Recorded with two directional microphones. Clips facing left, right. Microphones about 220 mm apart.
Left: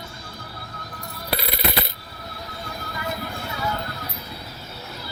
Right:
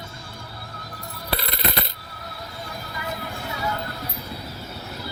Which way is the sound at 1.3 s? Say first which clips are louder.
Left 1 dB; 5° left (ahead or behind).